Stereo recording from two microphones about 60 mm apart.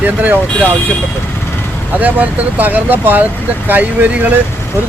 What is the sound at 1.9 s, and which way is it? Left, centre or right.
Speech, right.